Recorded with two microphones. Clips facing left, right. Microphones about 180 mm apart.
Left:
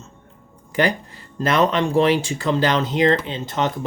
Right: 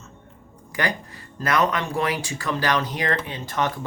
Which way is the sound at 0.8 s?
30° left (ahead or behind).